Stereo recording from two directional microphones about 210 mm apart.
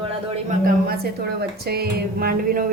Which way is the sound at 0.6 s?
45° right (ahead or behind).